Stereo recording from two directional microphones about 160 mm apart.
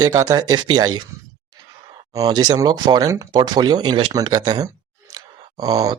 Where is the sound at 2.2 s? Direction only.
25° right (ahead or behind).